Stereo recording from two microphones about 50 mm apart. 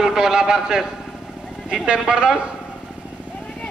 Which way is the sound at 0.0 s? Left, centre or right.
Centre.